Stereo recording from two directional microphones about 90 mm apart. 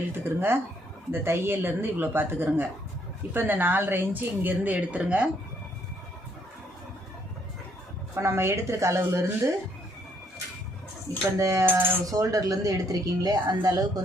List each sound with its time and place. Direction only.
0.1 s a woman's voice: 25° right (ahead or behind)
8.1 s a woman's voice: 30° right (ahead or behind)
11.3 s a woman's voice: 35° right (ahead or behind)
12.1 s speech: 40° right (ahead or behind)